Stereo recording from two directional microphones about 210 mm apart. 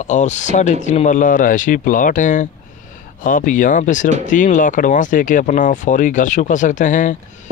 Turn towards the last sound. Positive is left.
turn(degrees=35)  # may be behind; listen again after turning